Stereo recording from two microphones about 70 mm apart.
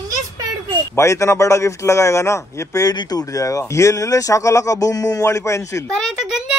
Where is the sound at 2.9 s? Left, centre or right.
Left.